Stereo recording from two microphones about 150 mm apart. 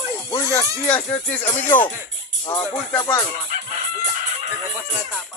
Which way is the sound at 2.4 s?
30° left (ahead or behind).